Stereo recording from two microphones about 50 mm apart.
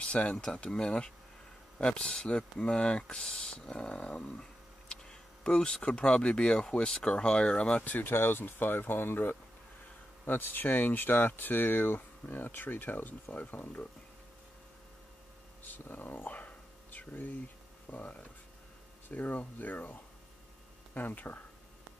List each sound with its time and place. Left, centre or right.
0.0 s speech: left
7.8 s speech: left
15.6 s a sound: left
17.8 s speech: left